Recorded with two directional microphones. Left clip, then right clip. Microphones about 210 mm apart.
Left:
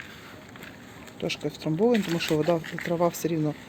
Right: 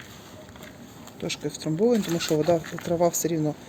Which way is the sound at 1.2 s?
10° left (ahead or behind).